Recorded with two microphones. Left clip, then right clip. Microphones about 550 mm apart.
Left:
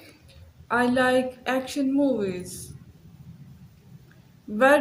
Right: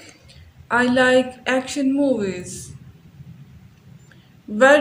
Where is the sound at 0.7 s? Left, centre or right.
Left.